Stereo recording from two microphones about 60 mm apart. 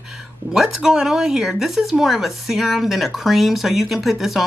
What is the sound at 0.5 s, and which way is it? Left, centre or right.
Speech, centre.